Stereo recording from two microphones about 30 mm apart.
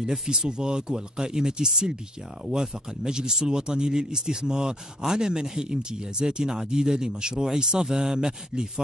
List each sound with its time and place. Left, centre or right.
0.0 s speech: right